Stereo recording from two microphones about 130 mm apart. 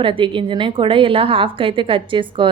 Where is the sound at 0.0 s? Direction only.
40° right (ahead or behind).